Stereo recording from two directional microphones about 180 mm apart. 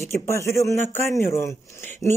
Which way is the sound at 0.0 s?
15° left (ahead or behind).